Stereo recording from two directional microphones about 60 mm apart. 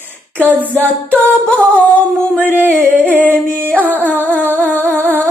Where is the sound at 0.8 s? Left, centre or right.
Left.